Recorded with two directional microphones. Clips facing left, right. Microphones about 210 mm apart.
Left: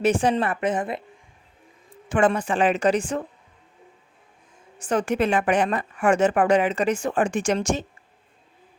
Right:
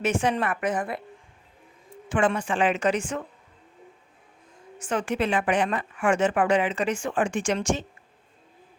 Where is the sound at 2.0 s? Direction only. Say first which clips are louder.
Left 3 dB; 40° left (ahead or behind).